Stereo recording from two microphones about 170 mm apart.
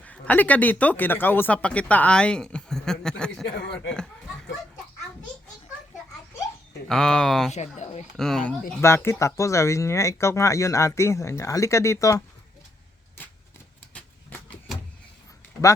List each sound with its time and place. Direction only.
0.0 s speech: 10° left (ahead or behind)
6.8 s speech: 5° left (ahead or behind)
7.5 s speech: 40° left (ahead or behind)
8.1 s speech: 5° left (ahead or behind)
8.8 s speech: 15° left (ahead or behind)
13.9 s vehicle: 10° left (ahead or behind)